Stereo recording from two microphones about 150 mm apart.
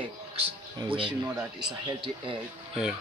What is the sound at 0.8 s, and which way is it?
Speech, 35° right (ahead or behind).